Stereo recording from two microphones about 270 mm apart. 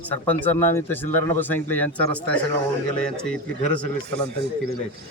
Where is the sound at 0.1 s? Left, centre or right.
Centre.